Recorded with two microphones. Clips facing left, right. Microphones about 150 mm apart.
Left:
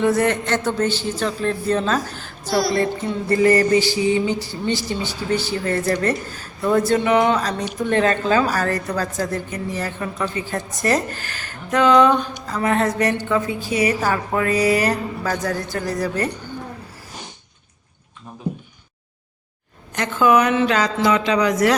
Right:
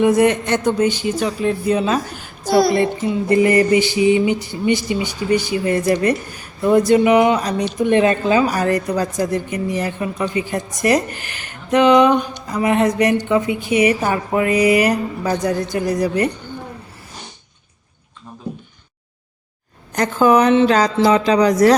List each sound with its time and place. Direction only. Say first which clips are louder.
0.0 s a woman's voice: right 4 dB; 15° right (ahead or behind)
2.5 s speech: right 6 dB; 55° right (ahead or behind)
2.7 s a woman's voice: right 3 dB; 15° right (ahead or behind)
20.0 s a woman's voice: right 3 dB; 35° right (ahead or behind)